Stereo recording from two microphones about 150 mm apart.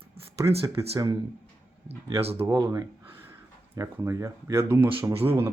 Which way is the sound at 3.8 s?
20° right (ahead or behind).